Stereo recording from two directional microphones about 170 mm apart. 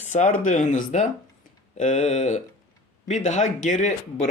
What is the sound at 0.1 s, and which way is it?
Speech, 45° left (ahead or behind).